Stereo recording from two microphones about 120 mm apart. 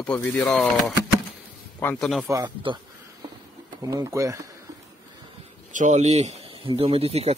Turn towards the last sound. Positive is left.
turn(degrees=-55)  # may be behind; listen again after turning